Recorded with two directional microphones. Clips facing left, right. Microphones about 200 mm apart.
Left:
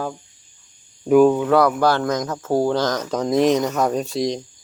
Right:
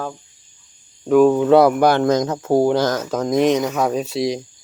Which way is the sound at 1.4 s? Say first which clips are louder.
Right 4 dB; 25° right (ahead or behind).